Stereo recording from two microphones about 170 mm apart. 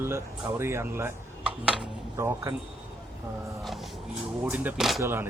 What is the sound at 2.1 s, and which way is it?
Speech, 20° right (ahead or behind).